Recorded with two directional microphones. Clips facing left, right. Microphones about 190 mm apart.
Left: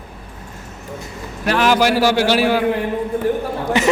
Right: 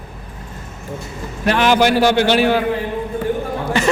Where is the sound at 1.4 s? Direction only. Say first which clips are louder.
Right 1 dB; centre (ahead or behind).